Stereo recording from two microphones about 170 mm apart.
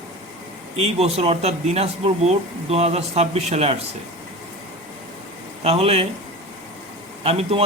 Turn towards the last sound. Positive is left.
turn(degrees=-35)  # may be behind; listen again after turning